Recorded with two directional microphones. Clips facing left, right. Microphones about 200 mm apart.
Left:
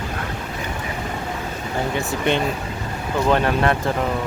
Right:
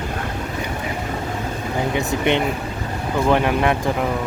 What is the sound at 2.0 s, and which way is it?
Speech, 20° right (ahead or behind).